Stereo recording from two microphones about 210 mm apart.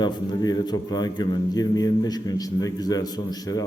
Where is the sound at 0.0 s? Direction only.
20° left (ahead or behind).